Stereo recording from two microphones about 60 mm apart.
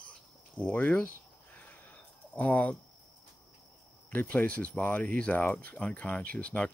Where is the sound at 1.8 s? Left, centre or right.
Left.